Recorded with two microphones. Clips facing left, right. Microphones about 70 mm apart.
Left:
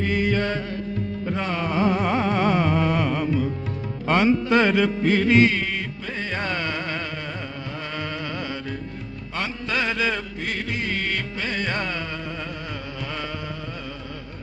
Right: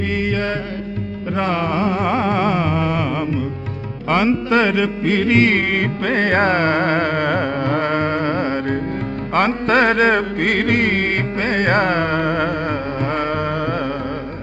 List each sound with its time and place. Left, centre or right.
0.2 s music: right
1.4 s music: right